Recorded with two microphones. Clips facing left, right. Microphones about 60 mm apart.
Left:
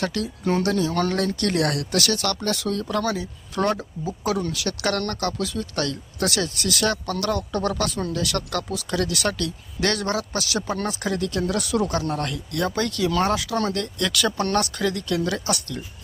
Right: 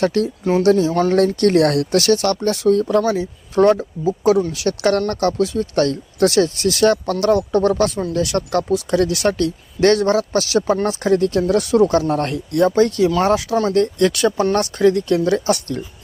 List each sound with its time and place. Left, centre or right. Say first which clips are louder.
0.0 s speech: right 8 dB; right
0.9 s speech: right 6 dB; centre
1.4 s speech: right 9 dB; right
12.5 s speech: right 11 dB; right